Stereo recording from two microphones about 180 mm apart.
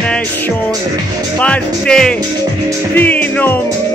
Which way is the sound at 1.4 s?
5° left (ahead or behind).